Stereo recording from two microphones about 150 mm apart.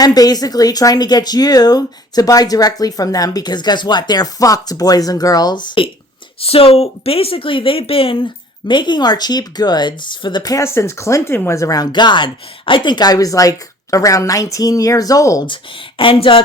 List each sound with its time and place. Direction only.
0.0 s speech: 25° left (ahead or behind)
16.0 s speech: 35° left (ahead or behind)